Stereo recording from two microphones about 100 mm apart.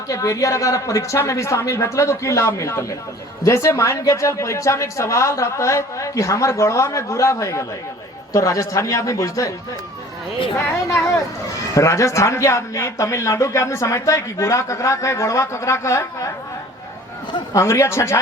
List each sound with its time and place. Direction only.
0.1 s speech: 35° left (ahead or behind)
10.6 s speech: 25° left (ahead or behind)
17.5 s speech: 30° left (ahead or behind)